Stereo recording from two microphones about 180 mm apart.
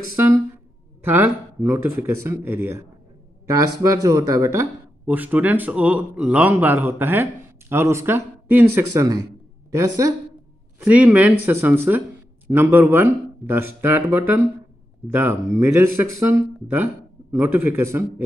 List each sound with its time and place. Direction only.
0.1 s speech: 15° right (ahead or behind)